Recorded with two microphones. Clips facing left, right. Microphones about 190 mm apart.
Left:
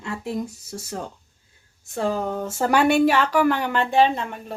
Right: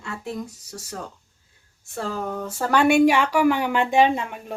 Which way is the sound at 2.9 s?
10° right (ahead or behind).